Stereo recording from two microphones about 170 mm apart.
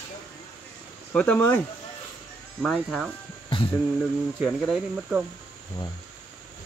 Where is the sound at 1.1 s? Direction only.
10° left (ahead or behind).